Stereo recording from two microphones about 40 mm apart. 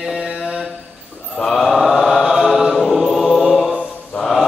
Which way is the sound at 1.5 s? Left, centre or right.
Centre.